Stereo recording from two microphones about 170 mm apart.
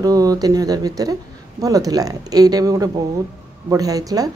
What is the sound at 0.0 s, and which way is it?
A woman's voice, 20° right (ahead or behind).